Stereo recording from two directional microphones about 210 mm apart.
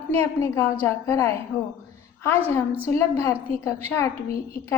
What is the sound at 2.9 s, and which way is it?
A woman's voice, 15° left (ahead or behind).